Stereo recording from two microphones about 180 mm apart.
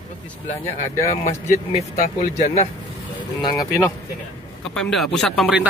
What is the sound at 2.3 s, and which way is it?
Speech, 40° left (ahead or behind).